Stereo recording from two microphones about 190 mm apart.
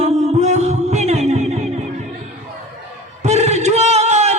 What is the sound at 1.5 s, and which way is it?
Music, 35° right (ahead or behind).